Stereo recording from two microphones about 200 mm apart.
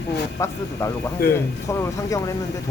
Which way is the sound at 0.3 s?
15° left (ahead or behind).